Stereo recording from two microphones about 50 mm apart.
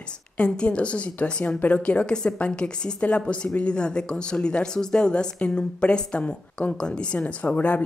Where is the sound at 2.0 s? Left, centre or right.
Centre.